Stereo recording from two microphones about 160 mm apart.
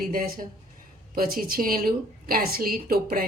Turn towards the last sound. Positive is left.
turn(degrees=-70)  # may be behind; listen again after turning